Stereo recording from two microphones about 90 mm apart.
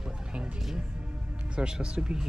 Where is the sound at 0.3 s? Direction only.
10° right (ahead or behind).